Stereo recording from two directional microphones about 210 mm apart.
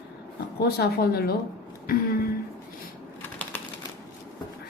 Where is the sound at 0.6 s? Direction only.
50° left (ahead or behind).